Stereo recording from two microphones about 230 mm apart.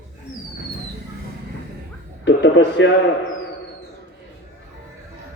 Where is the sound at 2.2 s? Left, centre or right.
Left.